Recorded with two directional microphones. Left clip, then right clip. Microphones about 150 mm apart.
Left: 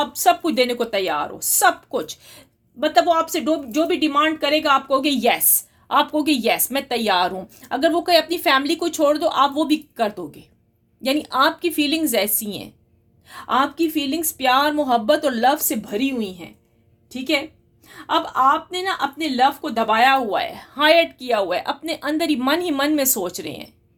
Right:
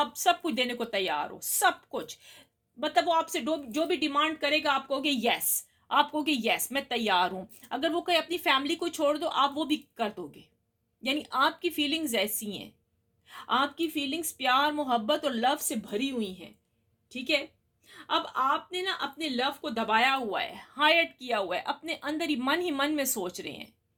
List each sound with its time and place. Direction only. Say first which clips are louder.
0.0 s a woman's voice: left 9 dB; 35° left (ahead or behind)
17.8 s a woman's voice: left 9 dB; 30° left (ahead or behind)